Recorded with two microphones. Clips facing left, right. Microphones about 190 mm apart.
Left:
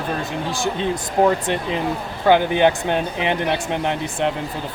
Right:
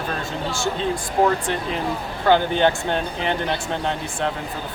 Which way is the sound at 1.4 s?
20° left (ahead or behind).